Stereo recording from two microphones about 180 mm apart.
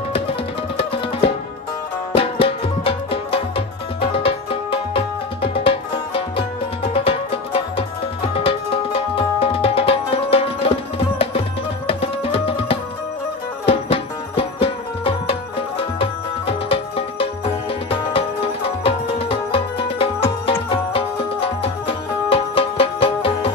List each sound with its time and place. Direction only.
0.1 s music: 30° left (ahead or behind)